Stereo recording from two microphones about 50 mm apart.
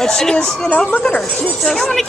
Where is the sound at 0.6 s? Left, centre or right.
Left.